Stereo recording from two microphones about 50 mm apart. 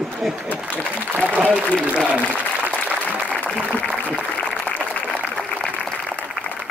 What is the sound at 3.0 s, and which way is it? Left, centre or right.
Applause, left.